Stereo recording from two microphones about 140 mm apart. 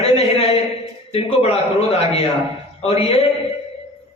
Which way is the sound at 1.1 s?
45° left (ahead or behind).